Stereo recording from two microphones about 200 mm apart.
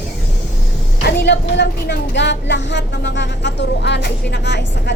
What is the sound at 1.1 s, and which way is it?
Speech, 55° left (ahead or behind).